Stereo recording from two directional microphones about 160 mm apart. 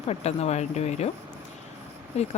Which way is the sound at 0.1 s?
40° left (ahead or behind).